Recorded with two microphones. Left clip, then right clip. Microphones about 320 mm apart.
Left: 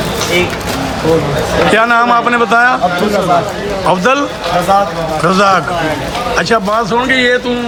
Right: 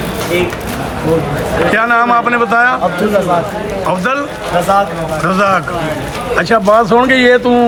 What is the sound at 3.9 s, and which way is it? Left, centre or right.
Speech, centre.